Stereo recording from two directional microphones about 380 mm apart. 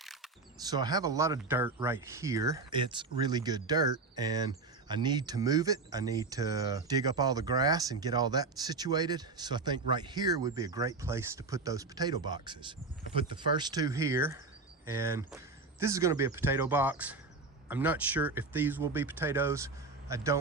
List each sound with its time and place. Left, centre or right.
0.0 s speech: centre